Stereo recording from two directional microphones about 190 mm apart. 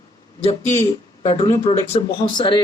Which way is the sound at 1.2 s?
25° left (ahead or behind).